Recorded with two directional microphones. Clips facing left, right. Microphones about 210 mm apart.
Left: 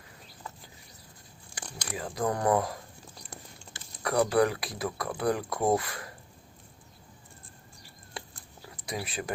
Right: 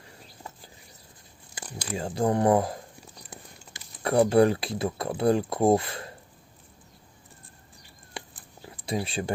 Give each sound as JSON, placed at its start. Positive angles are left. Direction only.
{"t": 1.9, "sound": "speech", "side_deg": -30}
{"t": 4.0, "sound": "speech", "side_deg": -25}
{"t": 8.7, "sound": "speech", "side_deg": -30}